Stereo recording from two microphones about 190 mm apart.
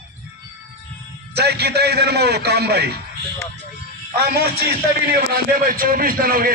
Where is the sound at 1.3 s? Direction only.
60° right (ahead or behind).